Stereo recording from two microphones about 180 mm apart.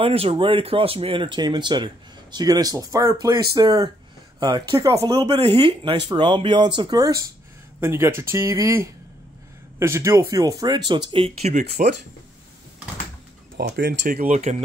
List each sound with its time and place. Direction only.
0.0 s speech: 30° right (ahead or behind)
13.6 s speech: 55° right (ahead or behind); by 14.6 s 40° right (ahead or behind)